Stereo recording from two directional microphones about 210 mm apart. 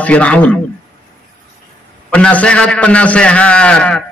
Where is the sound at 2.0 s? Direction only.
5° left (ahead or behind).